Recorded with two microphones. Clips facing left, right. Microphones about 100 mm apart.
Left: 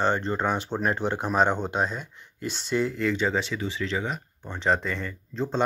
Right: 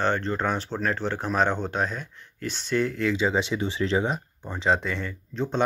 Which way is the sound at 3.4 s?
20° right (ahead or behind).